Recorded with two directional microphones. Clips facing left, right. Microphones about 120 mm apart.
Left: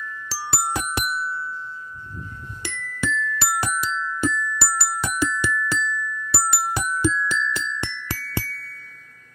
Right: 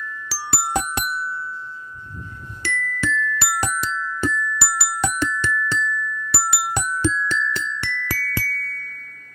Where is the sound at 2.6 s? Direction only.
15° left (ahead or behind).